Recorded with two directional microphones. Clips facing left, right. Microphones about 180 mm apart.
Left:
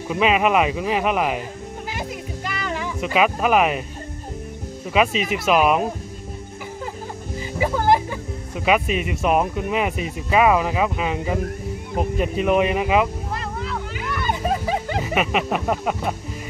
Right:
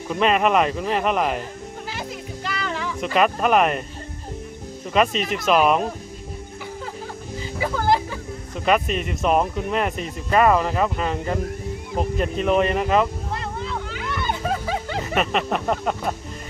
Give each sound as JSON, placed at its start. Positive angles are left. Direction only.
{"t": 0.1, "sound": "speech", "side_deg": 5}
{"t": 2.6, "sound": "speech", "side_deg": 10}
{"t": 4.9, "sound": "speech", "side_deg": 5}
{"t": 7.6, "sound": "speech", "side_deg": 15}
{"t": 13.7, "sound": "music", "side_deg": 5}